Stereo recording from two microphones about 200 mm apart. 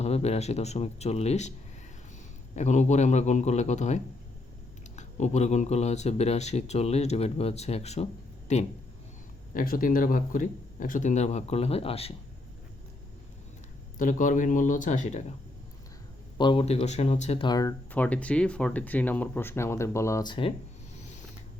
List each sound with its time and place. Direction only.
0.0 s speech: 30° left (ahead or behind)
2.6 s speech: 35° left (ahead or behind)
14.0 s speech: 40° left (ahead or behind)
16.4 s speech: 25° left (ahead or behind)
20.9 s a sound: 35° left (ahead or behind)